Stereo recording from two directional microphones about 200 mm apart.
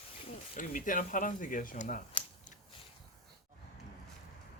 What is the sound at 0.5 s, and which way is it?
Speech, 40° left (ahead or behind).